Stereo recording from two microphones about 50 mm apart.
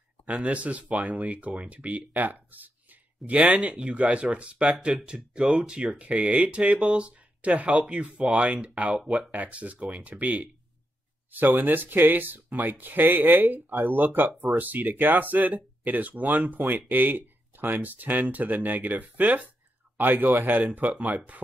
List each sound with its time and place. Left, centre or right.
0.3 s speech: right
9.3 s speech: right
11.5 s speech: right